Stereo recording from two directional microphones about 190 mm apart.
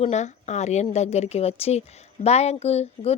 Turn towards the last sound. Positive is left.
turn(degrees=35)  # may be behind; listen again after turning